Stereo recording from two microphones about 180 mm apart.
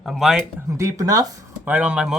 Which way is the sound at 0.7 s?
20° right (ahead or behind).